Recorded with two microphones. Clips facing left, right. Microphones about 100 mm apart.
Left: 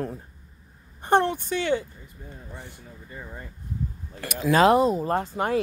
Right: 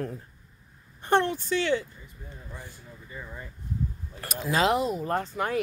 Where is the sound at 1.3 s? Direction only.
55° left (ahead or behind).